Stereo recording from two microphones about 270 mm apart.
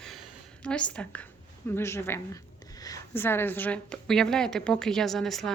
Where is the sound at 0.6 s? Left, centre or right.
Centre.